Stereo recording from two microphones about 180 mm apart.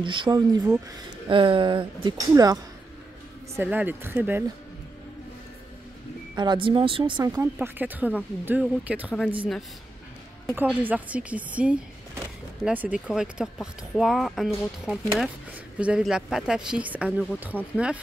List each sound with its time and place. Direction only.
0.0 s speech: 25° right (ahead or behind)
3.6 s speech: 10° right (ahead or behind)
6.3 s speech: 25° right (ahead or behind); by 17.9 s 5° right (ahead or behind)